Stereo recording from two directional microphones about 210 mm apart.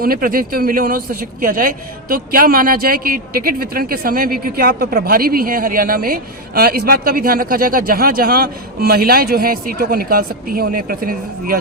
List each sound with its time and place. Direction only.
0.0 s speech: 45° right (ahead or behind)